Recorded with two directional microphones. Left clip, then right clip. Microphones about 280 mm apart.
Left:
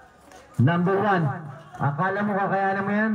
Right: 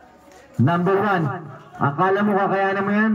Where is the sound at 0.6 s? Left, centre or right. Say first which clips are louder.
Right 3 dB; right.